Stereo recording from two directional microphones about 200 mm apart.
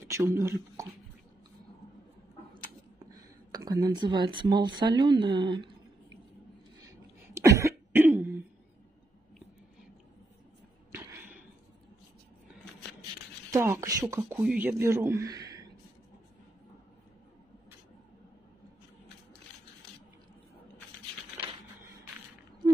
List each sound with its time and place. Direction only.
0.0 s speech: 15° right (ahead or behind)
3.1 s speech: 20° right (ahead or behind)
7.3 s cough: 15° right (ahead or behind)
10.9 s a sound: 10° right (ahead or behind)
13.5 s speech: 15° right (ahead or behind)